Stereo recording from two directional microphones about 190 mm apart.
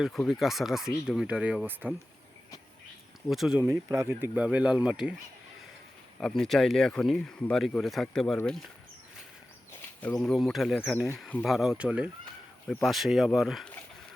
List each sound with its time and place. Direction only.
0.0 s speech: centre (ahead or behind)
3.2 s speech: centre (ahead or behind)
3.6 s speech: 15° right (ahead or behind)
6.1 s speech: 5° left (ahead or behind)
10.0 s speech: 5° left (ahead or behind)